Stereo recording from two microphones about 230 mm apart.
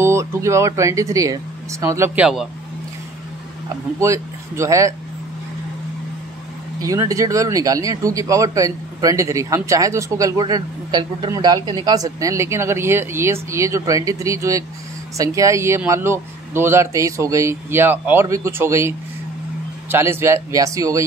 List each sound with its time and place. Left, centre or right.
0.0 s speech: centre
3.6 s speech: centre
6.8 s speech: centre